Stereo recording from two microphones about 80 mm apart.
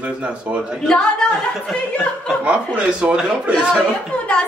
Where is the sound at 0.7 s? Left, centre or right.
Centre.